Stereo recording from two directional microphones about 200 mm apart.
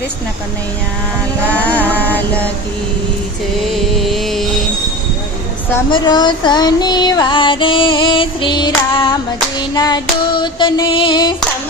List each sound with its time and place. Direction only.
1.5 s a sound: 5° left (ahead or behind)
3.7 s music: centre (ahead or behind)
5.9 s female singing: 20° left (ahead or behind)